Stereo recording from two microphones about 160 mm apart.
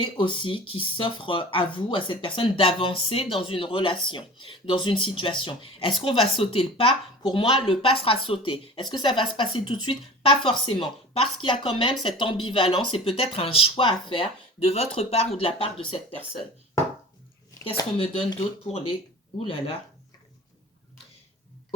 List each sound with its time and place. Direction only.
0.0 s speech: 30° left (ahead or behind)
17.6 s speech: 30° left (ahead or behind)